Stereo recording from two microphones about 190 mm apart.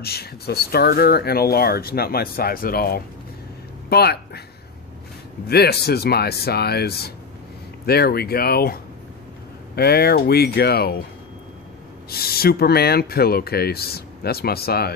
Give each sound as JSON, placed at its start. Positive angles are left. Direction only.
{"t": 0.0, "sound": "speech", "side_deg": 55}
{"t": 5.5, "sound": "speech", "side_deg": 55}
{"t": 12.1, "sound": "speech", "side_deg": 55}